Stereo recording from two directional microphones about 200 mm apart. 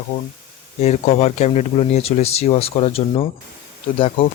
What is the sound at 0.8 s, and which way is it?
Speech, 35° left (ahead or behind).